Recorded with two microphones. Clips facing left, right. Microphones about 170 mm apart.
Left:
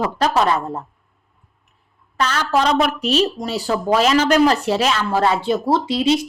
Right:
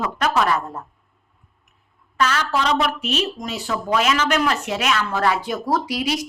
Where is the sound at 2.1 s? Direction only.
35° left (ahead or behind).